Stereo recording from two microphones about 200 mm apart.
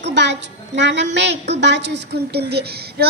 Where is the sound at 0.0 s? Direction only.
60° right (ahead or behind).